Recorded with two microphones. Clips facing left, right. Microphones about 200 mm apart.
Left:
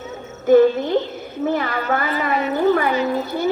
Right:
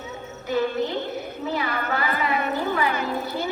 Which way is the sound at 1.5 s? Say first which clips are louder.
Left 6 dB; 50° left (ahead or behind).